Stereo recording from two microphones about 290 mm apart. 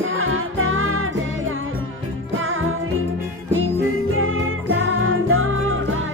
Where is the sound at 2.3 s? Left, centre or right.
Right.